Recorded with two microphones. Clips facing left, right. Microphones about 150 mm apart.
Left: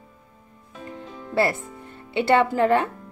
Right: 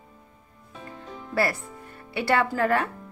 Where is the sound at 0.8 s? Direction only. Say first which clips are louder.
Left 3 dB; 25° left (ahead or behind).